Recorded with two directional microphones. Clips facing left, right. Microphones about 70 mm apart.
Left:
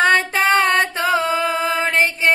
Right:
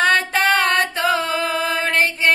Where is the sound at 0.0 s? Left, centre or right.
Left.